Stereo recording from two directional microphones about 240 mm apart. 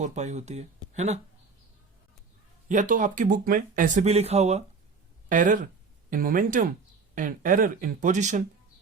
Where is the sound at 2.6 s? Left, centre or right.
Right.